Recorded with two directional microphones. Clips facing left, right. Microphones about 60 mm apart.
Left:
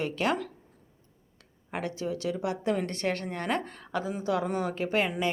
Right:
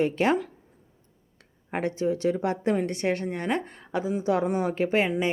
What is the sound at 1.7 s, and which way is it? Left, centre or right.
Speech, right.